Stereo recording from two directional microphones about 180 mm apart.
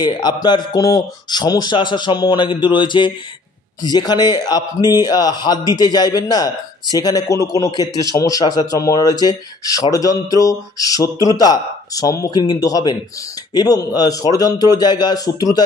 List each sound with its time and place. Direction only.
0.0 s a man's voice: 25° left (ahead or behind)